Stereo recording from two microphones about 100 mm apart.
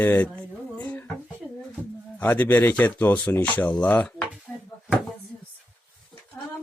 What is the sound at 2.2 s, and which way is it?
Speech, 20° left (ahead or behind).